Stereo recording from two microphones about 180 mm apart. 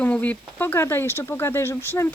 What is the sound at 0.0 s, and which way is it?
Speech, 10° left (ahead or behind).